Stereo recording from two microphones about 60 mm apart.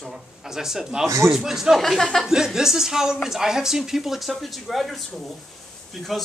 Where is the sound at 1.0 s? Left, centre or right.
Right.